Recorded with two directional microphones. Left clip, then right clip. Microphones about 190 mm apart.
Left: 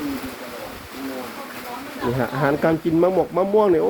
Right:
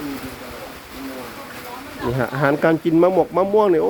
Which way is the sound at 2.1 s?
30° right (ahead or behind).